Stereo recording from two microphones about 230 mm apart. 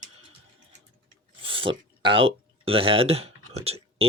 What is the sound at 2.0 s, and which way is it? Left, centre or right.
Speech, right.